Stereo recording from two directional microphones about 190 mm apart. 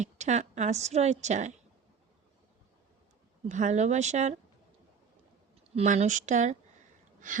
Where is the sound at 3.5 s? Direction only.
40° right (ahead or behind).